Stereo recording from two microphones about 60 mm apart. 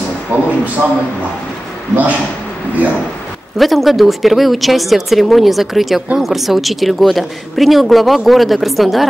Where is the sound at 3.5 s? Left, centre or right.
Centre.